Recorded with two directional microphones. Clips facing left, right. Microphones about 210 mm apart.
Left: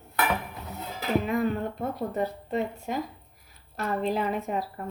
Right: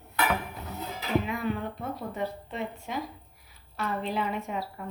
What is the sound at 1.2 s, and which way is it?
Speech, 45° left (ahead or behind).